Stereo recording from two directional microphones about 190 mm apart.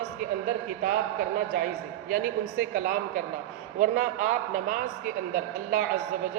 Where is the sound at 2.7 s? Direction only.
45° right (ahead or behind).